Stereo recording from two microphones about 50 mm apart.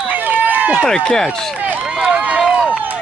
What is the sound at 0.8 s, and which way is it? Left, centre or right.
Speech, centre.